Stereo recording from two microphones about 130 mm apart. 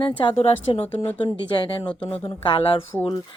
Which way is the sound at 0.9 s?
15° left (ahead or behind).